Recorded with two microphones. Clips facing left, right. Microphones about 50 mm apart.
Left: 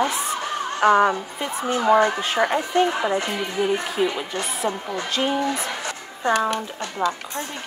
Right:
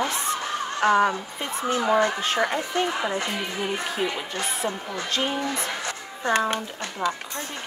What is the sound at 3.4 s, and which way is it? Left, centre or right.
A woman's voice, centre.